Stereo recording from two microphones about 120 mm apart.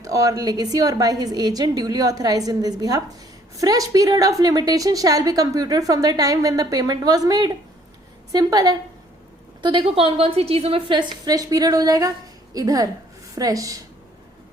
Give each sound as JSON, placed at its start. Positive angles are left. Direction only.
{"t": 0.0, "sound": "a woman's voice", "side_deg": -30}